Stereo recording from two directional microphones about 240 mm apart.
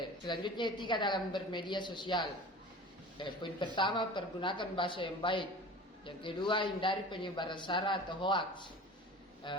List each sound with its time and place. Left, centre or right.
0.3 s a man's voice: centre